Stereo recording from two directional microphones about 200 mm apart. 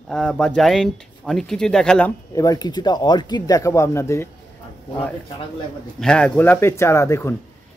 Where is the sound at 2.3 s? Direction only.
20° left (ahead or behind).